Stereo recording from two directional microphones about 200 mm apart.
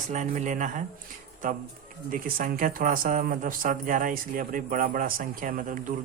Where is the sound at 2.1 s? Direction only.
40° right (ahead or behind).